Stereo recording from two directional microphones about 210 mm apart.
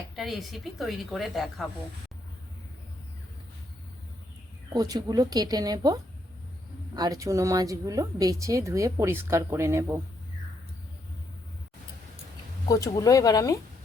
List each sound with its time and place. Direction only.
0.2 s a woman's voice: centre (ahead or behind)
4.7 s speech: 20° right (ahead or behind)
12.6 s speech: 15° left (ahead or behind)